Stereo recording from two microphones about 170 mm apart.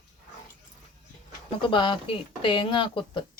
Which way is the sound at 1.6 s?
30° left (ahead or behind).